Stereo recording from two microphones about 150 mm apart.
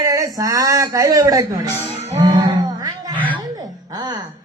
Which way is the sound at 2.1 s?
25° right (ahead or behind).